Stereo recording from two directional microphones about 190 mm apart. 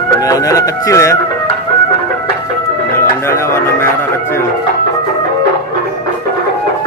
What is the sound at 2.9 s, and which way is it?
Music, 15° left (ahead or behind).